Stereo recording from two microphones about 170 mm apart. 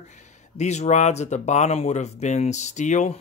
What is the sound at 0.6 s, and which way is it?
Speech, 40° left (ahead or behind).